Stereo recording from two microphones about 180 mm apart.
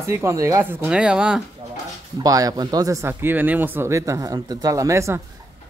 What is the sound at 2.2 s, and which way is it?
Speech, 20° right (ahead or behind).